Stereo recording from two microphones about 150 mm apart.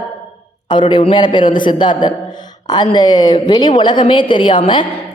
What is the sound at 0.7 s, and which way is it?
A man's voice, 30° left (ahead or behind).